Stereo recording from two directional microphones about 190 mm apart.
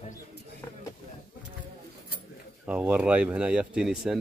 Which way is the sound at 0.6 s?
15° left (ahead or behind).